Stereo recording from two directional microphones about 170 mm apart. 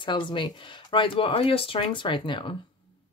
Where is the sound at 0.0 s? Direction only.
30° left (ahead or behind).